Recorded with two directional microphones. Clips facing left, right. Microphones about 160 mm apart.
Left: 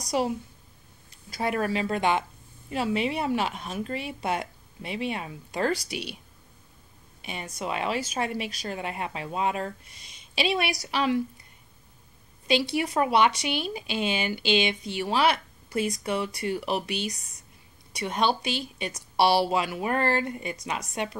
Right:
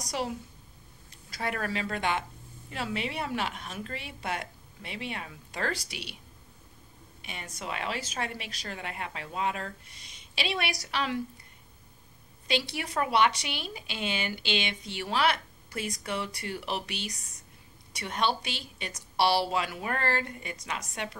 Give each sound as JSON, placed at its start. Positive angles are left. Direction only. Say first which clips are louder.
{"t": 1.3, "sound": "speech", "louder": "left 6 dB", "side_deg": 25}
{"t": 7.2, "sound": "speech", "louder": "left 6 dB", "side_deg": 25}
{"t": 12.4, "sound": "speech", "louder": "left 7 dB", "side_deg": 20}